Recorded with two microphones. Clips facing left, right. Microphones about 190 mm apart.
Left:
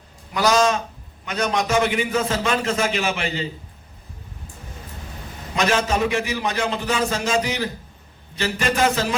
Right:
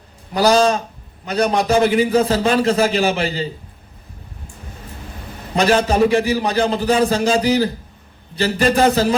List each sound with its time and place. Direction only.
0.3 s a man's voice: 35° right (ahead or behind)
5.5 s a man's voice: 35° right (ahead or behind)